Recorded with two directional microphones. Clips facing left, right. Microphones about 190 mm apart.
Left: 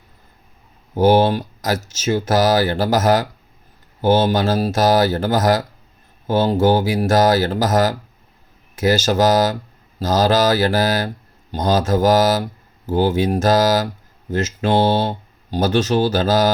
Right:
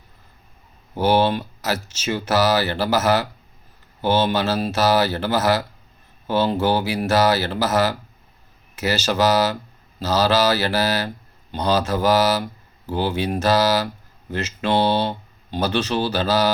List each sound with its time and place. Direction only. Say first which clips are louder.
0.9 s speech: left 4 dB; 45° left (ahead or behind)